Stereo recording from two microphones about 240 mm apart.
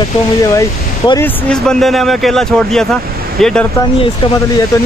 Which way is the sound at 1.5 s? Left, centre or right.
Centre.